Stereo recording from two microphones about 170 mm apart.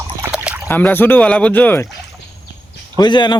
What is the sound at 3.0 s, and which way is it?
Speech, 25° left (ahead or behind).